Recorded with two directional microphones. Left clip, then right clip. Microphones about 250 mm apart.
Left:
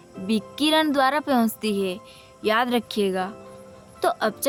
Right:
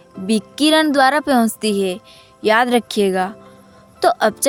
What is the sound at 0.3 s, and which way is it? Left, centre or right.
A woman's voice, right.